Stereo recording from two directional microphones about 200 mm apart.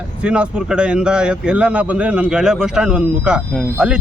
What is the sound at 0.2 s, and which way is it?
A man's voice, 5° right (ahead or behind).